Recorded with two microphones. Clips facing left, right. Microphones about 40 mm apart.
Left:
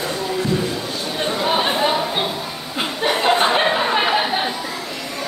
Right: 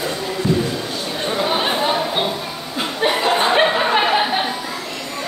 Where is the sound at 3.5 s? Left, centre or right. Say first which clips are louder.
Right 2 dB; centre.